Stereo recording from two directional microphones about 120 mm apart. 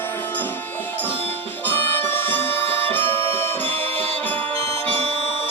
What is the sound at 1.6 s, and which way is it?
Music, 20° left (ahead or behind).